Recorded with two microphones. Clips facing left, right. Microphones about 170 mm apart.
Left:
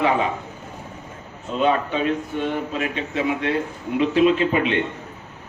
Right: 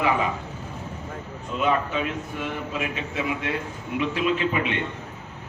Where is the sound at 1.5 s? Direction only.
25° left (ahead or behind).